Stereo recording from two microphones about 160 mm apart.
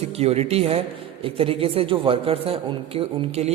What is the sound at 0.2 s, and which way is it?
Mantra, 40° right (ahead or behind).